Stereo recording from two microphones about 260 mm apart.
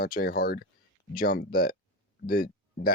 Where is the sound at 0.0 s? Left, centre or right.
Left.